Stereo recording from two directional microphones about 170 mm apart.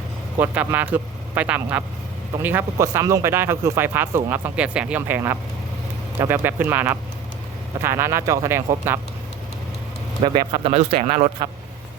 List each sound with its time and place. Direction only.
0.3 s speech: 10° right (ahead or behind)
10.2 s speech: 30° right (ahead or behind)
11.4 s a man's voice: 25° right (ahead or behind)